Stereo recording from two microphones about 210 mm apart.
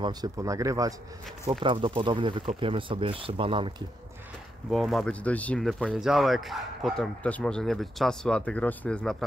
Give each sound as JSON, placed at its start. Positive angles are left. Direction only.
{"t": 0.0, "sound": "speech", "side_deg": -20}
{"t": 4.6, "sound": "speech", "side_deg": 0}